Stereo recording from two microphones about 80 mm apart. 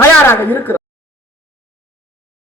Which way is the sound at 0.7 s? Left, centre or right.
Left.